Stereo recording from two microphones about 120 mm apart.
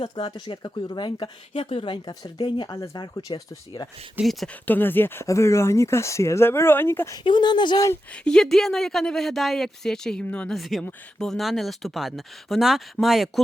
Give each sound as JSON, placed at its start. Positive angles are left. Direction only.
{"t": 0.0, "sound": "speech", "side_deg": 40}
{"t": 4.2, "sound": "speech", "side_deg": 0}
{"t": 4.6, "sound": "speech", "side_deg": 15}
{"t": 7.3, "sound": "speech", "side_deg": 40}
{"t": 8.1, "sound": "speech", "side_deg": 5}